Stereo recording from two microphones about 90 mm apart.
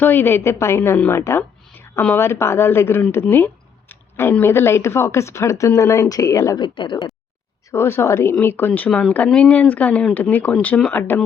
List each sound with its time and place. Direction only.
0.0 s a woman's voice: 20° left (ahead or behind); by 6.6 s 40° left (ahead or behind)
6.6 s speech: 60° left (ahead or behind)
7.7 s a woman's voice: 25° left (ahead or behind)
8.9 s a woman's voice: 5° left (ahead or behind)